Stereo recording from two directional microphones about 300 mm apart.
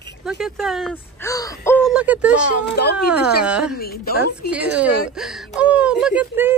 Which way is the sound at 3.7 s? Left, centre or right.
Left.